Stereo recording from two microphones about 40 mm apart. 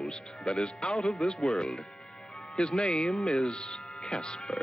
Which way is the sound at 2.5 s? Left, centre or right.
Left.